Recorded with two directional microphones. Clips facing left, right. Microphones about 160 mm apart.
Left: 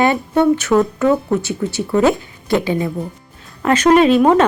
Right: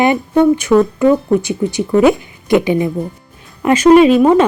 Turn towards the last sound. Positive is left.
turn(degrees=-10)  # may be behind; listen again after turning